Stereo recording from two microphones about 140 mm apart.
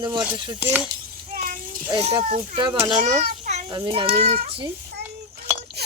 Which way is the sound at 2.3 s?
35° right (ahead or behind).